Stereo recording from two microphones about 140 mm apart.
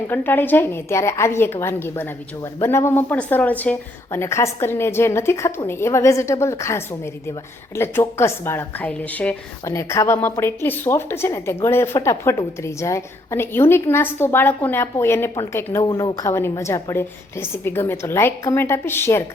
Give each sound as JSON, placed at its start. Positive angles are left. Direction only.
{"t": 0.1, "sound": "a woman's voice", "side_deg": 15}